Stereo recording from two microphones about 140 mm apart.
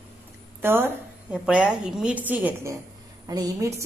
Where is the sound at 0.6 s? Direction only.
15° right (ahead or behind).